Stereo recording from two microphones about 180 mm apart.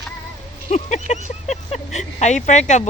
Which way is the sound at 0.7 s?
40° left (ahead or behind).